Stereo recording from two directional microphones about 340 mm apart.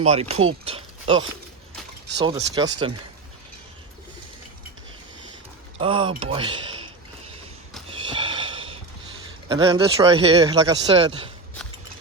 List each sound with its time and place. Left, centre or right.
0.0 s speech: centre
0.6 s a sound: centre
2.2 s speech: centre
5.8 s speech: centre
8.1 s snort: centre
9.6 s speech: centre